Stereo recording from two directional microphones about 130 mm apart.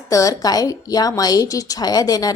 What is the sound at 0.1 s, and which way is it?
A woman's voice, 25° left (ahead or behind).